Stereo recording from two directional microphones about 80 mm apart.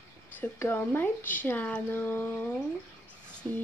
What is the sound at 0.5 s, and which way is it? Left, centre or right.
Speech, left.